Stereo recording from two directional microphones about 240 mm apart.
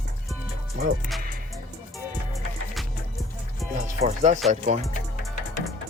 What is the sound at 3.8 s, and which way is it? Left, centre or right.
Music, right.